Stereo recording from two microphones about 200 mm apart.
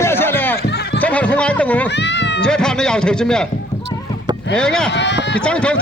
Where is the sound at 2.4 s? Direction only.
5° left (ahead or behind).